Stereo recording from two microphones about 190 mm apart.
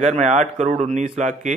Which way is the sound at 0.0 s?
40° right (ahead or behind).